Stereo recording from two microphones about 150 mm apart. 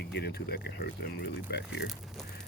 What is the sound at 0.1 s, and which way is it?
Speech, 90° left.